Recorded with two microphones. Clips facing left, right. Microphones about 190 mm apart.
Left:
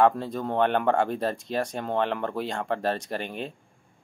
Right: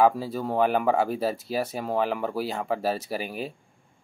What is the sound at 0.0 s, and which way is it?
Speech, 5° right (ahead or behind).